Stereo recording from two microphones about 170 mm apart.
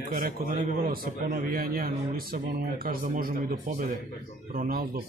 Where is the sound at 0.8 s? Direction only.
65° right (ahead or behind).